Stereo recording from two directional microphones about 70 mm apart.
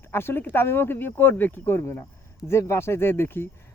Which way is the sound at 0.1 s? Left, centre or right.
Left.